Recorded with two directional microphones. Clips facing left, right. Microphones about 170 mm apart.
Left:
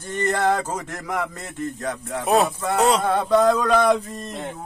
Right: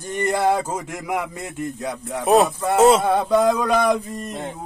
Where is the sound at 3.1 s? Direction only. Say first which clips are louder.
Even; 10° right (ahead or behind).